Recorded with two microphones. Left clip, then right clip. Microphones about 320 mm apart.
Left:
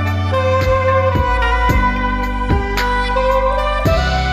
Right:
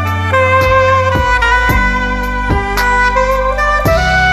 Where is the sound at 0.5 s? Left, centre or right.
Centre.